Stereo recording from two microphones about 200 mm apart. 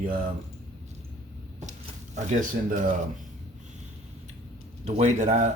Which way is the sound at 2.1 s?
40° right (ahead or behind).